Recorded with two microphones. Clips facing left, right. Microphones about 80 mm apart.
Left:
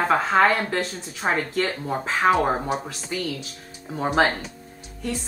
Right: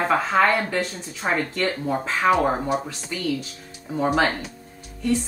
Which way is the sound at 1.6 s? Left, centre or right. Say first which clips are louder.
Right 2 dB; centre.